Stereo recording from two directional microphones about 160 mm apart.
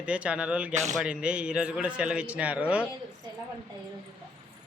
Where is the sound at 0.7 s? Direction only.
45° right (ahead or behind).